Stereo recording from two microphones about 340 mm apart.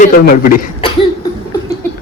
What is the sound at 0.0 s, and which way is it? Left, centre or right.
Speech, left.